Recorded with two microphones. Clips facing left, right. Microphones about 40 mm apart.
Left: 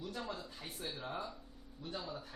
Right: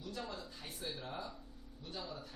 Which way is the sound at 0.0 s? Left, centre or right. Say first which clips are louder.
Left 2 dB; centre.